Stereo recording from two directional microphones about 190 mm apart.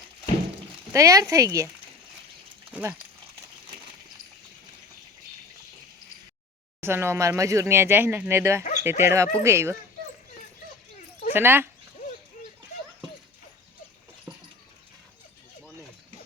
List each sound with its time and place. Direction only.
0.9 s speech: 15° right (ahead or behind)
2.7 s speech: 10° right (ahead or behind)
6.8 s speech: 15° right (ahead or behind)
11.3 s speech: 10° right (ahead or behind)
14.3 s a sound: 10° right (ahead or behind)